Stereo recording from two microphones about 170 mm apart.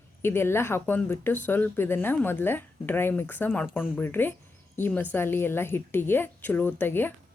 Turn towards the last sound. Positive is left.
turn(degrees=10)  # may be behind; listen again after turning